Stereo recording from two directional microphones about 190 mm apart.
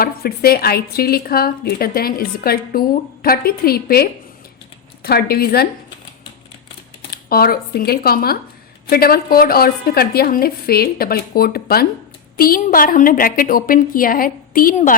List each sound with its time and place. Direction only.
0.0 s a woman's voice: 55° left (ahead or behind)
7.1 s a woman's voice: 50° left (ahead or behind)